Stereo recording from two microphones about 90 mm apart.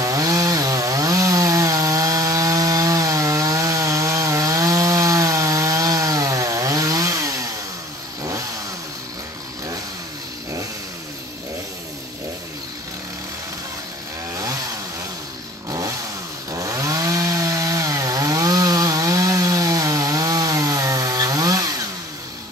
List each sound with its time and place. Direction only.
0.0 s chainsaw: 40° right (ahead or behind)
8.2 s vehicle: 35° right (ahead or behind)
14.3 s chainsaw: 40° right (ahead or behind)
16.5 s chainsaw: 40° right (ahead or behind)